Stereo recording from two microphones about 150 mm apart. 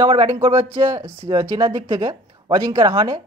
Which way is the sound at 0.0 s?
25° right (ahead or behind).